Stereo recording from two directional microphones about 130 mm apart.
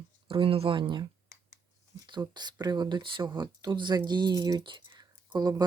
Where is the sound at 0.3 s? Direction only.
45° right (ahead or behind).